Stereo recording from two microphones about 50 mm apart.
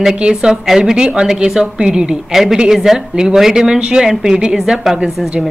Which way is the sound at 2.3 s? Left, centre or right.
Centre.